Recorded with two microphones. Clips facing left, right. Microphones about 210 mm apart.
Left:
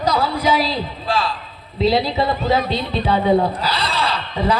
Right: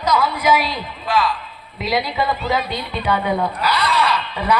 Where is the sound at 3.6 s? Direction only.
30° left (ahead or behind).